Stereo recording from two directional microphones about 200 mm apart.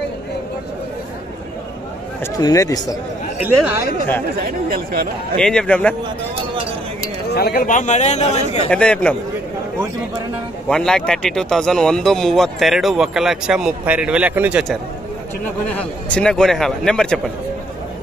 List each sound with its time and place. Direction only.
2.4 s speech: 15° left (ahead or behind)
3.4 s speech: 10° right (ahead or behind)
4.4 s speech: 50° right (ahead or behind)
5.4 s speech: 5° left (ahead or behind)
7.3 s a man's voice: 50° left (ahead or behind)
8.6 s speech: 5° left (ahead or behind)
10.7 s speech: 5° left (ahead or behind)